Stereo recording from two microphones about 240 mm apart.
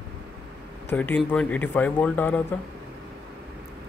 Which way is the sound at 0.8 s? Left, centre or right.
Centre.